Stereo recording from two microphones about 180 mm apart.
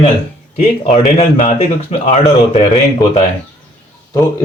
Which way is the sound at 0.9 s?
35° left (ahead or behind).